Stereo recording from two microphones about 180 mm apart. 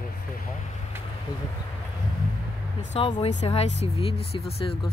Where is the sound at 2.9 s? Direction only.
35° left (ahead or behind).